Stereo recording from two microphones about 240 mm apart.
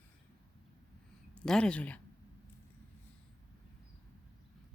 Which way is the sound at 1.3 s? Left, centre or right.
Centre.